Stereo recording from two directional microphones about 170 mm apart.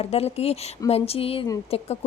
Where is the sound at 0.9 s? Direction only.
35° left (ahead or behind).